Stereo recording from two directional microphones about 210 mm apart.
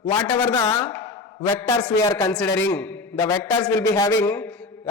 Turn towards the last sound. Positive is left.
turn(degrees=10)  # may be behind; listen again after turning